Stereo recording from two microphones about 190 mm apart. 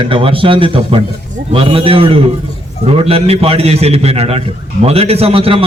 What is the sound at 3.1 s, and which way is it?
A man's voice, 30° right (ahead or behind).